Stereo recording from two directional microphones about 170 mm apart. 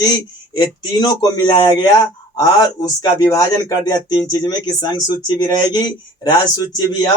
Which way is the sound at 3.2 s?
20° left (ahead or behind).